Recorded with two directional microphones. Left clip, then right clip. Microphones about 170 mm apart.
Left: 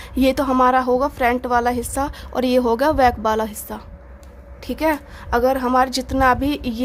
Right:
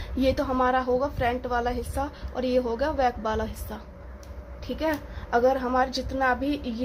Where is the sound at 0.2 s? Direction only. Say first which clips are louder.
Left 8 dB; 45° left (ahead or behind).